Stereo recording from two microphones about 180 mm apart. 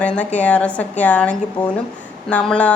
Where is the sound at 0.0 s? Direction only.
5° left (ahead or behind).